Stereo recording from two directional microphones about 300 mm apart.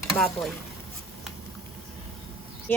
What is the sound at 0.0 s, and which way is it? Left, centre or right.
Speech, centre.